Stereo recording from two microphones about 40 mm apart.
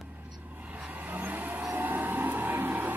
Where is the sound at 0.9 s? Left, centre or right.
Right.